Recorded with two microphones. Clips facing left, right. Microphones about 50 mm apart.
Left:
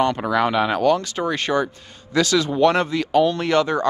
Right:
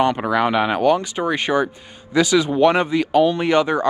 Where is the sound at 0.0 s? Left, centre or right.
Centre.